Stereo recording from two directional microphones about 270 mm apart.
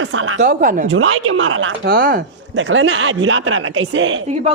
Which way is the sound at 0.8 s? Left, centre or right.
Right.